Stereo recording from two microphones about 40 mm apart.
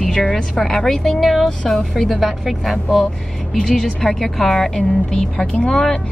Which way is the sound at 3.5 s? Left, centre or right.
Centre.